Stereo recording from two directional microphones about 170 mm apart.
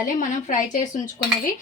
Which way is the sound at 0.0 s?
50° left (ahead or behind).